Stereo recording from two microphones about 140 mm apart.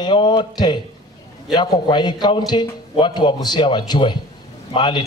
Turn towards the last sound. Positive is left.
turn(degrees=35)  # may be behind; listen again after turning